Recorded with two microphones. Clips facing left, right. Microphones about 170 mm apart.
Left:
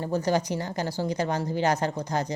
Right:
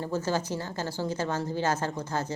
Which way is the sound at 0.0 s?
15° left (ahead or behind).